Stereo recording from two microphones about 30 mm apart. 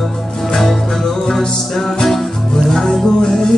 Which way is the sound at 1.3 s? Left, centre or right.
Left.